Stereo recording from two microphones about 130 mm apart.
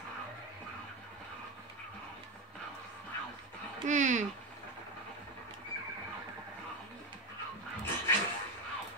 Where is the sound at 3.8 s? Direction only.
70° right (ahead or behind).